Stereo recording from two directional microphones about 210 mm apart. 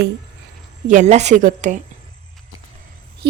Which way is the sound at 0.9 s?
35° right (ahead or behind).